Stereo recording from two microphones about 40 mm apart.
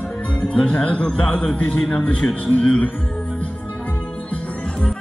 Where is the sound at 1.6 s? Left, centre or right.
Left.